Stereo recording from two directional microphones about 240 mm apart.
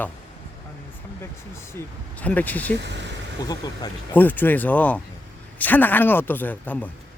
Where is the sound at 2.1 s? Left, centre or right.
Centre.